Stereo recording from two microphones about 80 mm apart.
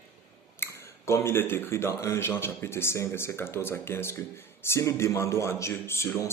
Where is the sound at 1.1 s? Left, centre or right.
Left.